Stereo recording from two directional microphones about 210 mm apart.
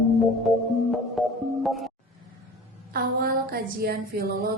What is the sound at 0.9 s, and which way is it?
Music, centre (ahead or behind).